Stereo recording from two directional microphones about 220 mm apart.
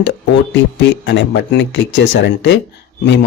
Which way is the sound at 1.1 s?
55° left (ahead or behind).